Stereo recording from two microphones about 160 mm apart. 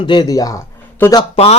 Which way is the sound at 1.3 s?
40° left (ahead or behind).